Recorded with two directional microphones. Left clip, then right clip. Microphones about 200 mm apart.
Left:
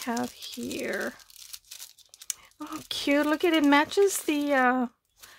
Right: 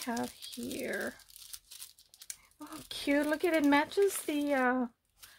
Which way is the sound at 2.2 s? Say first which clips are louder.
Left 10 dB; 40° left (ahead or behind).